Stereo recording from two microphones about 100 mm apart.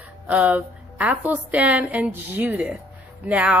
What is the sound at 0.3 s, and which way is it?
A woman's voice, 15° right (ahead or behind).